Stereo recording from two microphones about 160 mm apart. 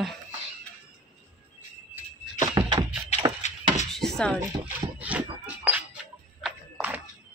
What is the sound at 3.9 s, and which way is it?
Chopping, centre (ahead or behind).